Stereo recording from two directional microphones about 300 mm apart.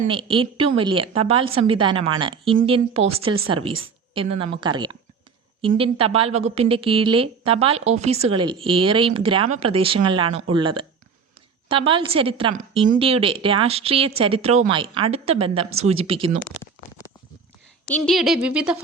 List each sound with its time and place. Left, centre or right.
0.0 s a woman's voice: centre
17.8 s speech: centre